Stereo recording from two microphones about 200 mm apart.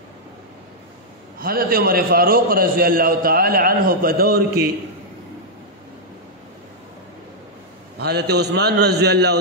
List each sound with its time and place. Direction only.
1.4 s a man's voice: 45° right (ahead or behind)
8.0 s a man's voice: 55° right (ahead or behind)